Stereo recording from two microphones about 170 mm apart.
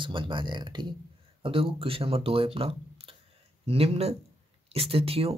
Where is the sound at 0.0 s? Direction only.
30° right (ahead or behind).